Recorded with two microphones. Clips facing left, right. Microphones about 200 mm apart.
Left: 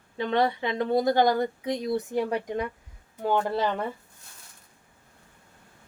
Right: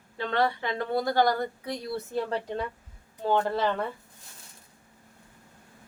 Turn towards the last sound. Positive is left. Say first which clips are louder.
# even
turn(degrees=15)  # may be behind; listen again after turning